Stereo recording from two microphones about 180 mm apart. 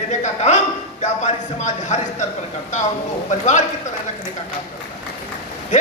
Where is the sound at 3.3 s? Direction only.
40° left (ahead or behind).